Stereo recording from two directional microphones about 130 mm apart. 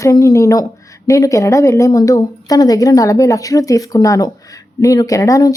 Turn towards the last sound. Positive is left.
turn(degrees=25)  # may be behind; listen again after turning